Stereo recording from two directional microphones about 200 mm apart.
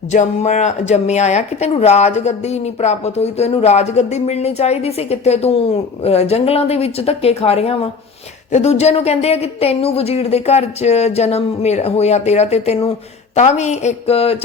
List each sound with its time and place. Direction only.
0.1 s a woman's voice: 35° left (ahead or behind)